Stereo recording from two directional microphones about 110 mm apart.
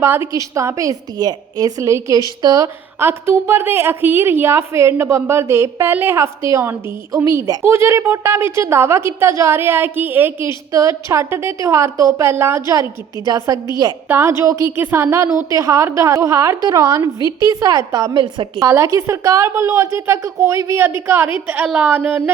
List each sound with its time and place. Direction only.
0.0 s a woman's voice: 25° right (ahead or behind)
3.0 s a woman's voice: 20° right (ahead or behind)
10.7 s a woman's voice: 30° right (ahead or behind)
14.1 s a woman's voice: 25° right (ahead or behind); by 18.6 s 45° right (ahead or behind)
18.6 s a woman's voice: 30° right (ahead or behind)